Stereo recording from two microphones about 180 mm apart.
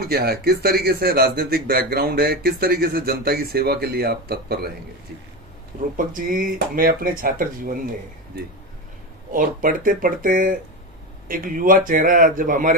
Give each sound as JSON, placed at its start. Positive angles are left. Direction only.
{"t": 0.0, "sound": "speech", "side_deg": -60}
{"t": 6.0, "sound": "speech", "side_deg": -50}
{"t": 9.3, "sound": "speech", "side_deg": -50}